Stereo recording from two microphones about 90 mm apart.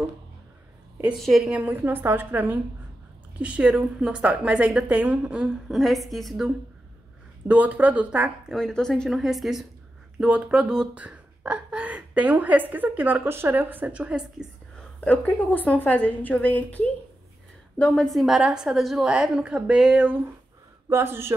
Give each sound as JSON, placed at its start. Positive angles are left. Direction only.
{"t": 1.1, "sound": "a woman's voice", "side_deg": 0}
{"t": 1.5, "sound": "a woman's voice", "side_deg": -20}
{"t": 5.7, "sound": "a woman's voice", "side_deg": 0}
{"t": 7.4, "sound": "speech", "side_deg": -15}
{"t": 8.5, "sound": "a woman's voice", "side_deg": 5}
{"t": 9.2, "sound": "a woman's voice", "side_deg": -5}
{"t": 10.2, "sound": "speech", "side_deg": -10}
{"t": 14.8, "sound": "a woman's voice", "side_deg": 15}
{"t": 18.0, "sound": "a woman's voice", "side_deg": 0}
{"t": 20.9, "sound": "a woman's voice", "side_deg": -25}